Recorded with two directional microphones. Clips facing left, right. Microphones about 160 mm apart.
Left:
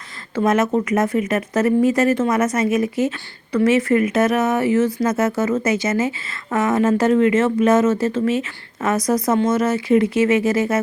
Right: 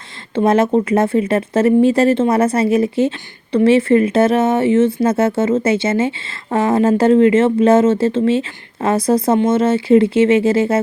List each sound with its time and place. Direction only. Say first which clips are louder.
0.3 s speech: right 4 dB; 30° right (ahead or behind)